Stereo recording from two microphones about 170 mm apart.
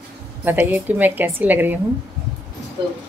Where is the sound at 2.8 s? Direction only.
25° right (ahead or behind).